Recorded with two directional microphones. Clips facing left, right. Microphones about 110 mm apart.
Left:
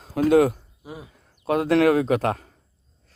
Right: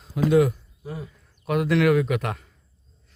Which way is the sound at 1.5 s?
35° left (ahead or behind).